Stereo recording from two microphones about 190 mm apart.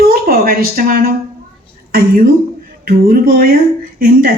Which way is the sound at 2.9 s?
50° right (ahead or behind).